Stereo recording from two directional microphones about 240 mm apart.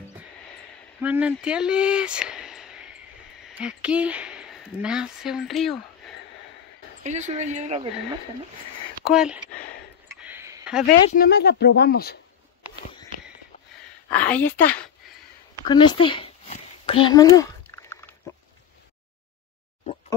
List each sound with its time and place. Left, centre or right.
1.0 s speech: centre
7.0 s speech: right
9.1 s a woman's voice: centre
10.0 s a sound: centre
10.9 s speech: left
14.1 s a woman's voice: centre
15.6 s a sound: centre